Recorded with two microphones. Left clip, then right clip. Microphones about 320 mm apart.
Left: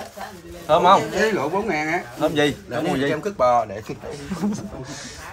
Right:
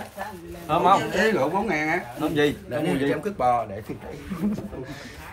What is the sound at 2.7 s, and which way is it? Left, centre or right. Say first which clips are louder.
Speech: left 2 dB; centre.